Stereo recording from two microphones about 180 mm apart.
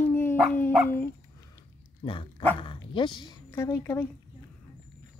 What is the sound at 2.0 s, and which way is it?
Speech, 30° left (ahead or behind).